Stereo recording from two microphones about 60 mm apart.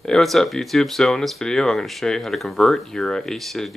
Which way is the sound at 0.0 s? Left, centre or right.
Centre.